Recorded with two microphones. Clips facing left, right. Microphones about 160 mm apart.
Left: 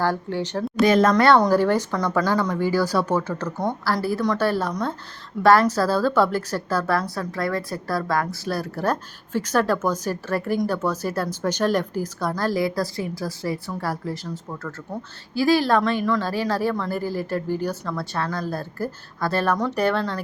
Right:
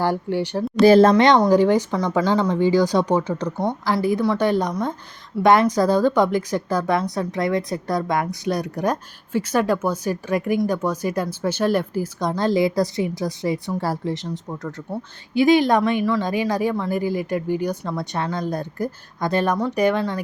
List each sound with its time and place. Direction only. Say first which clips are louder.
0.0 s speech: right 2 dB; 15° right (ahead or behind)
0.8 s speech: right 5 dB; 30° right (ahead or behind)
1.5 s speech: right 3 dB; 15° right (ahead or behind)
12.3 s a woman's voice: right 5 dB; 20° right (ahead or behind)